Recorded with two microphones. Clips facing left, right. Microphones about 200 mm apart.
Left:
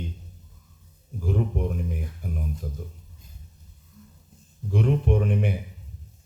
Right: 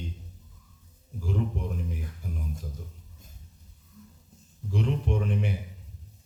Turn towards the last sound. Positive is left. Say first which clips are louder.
# left 5 dB
turn(degrees=55)  # may be behind; listen again after turning